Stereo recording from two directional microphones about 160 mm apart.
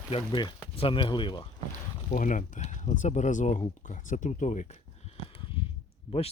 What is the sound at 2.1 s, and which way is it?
Speech, 55° left (ahead or behind).